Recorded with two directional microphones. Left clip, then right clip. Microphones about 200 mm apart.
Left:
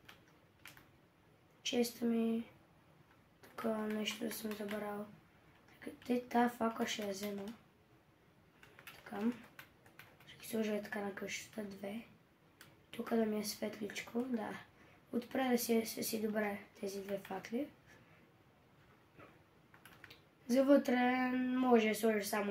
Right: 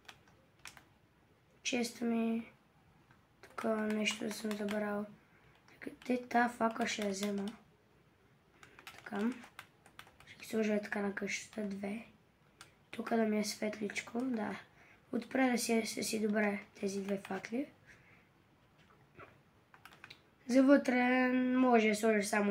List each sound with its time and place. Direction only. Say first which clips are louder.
1.6 s speech: even; 35° right (ahead or behind)
3.3 s speech: right 3 dB; 35° right (ahead or behind)
6.0 s speech: right 2 dB; 35° right (ahead or behind)
9.1 s a sound: right 4 dB; 40° right (ahead or behind)
10.2 s speech: right 4 dB; 40° right (ahead or behind)
20.4 s speech: right 2 dB; 35° right (ahead or behind)